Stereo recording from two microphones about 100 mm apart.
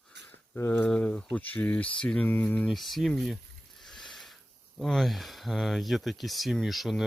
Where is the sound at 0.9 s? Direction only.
10° left (ahead or behind).